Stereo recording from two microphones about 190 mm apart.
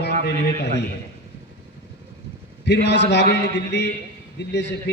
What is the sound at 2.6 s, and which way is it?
A man's voice, 65° left (ahead or behind).